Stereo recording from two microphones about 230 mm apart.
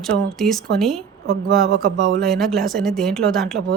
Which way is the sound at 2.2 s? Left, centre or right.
Centre.